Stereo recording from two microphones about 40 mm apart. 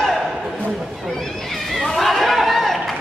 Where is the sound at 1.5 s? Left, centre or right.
Centre.